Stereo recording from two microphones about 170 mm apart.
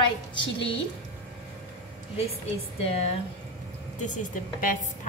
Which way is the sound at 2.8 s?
40° left (ahead or behind).